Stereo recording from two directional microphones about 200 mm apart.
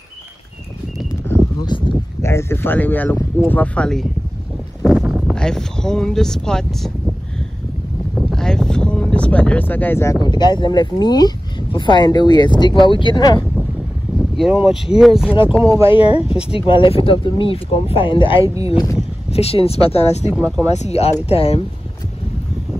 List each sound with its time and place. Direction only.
1.3 s a sound: 20° left (ahead or behind)
2.2 s speech: 10° left (ahead or behind)
4.8 s a sound: 5° right (ahead or behind)
5.3 s speech: 5° left (ahead or behind)
8.2 s a sound: centre (ahead or behind)
10.2 s speech: 20° left (ahead or behind)
14.1 s speech: centre (ahead or behind)
15.8 s speech: 25° left (ahead or behind)
16.3 s speech: 5° right (ahead or behind)
16.5 s speech: 25° left (ahead or behind)
18.4 s speech: 15° right (ahead or behind)
18.7 s speech: 20° left (ahead or behind)
19.3 s speech: 30° left (ahead or behind)